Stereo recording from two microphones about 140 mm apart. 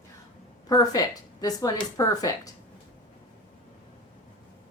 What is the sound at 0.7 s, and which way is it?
Speech, 25° left (ahead or behind).